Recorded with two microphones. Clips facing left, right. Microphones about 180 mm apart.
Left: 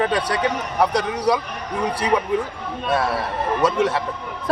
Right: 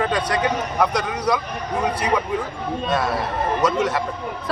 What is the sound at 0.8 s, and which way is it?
Speech, 35° left (ahead or behind).